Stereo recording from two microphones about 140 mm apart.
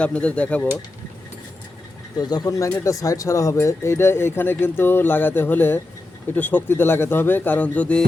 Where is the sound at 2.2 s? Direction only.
30° left (ahead or behind).